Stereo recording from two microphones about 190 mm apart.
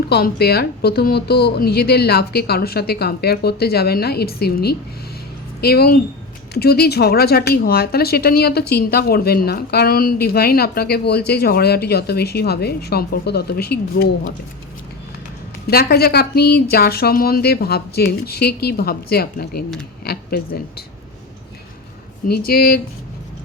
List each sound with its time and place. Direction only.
0.1 s a woman's voice: 55° left (ahead or behind)
15.6 s a woman's voice: 55° left (ahead or behind)
22.3 s speech: 50° left (ahead or behind)